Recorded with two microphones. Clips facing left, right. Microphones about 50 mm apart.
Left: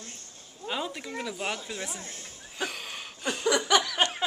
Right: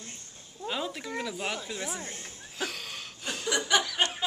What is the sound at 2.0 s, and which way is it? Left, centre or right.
Speech, right.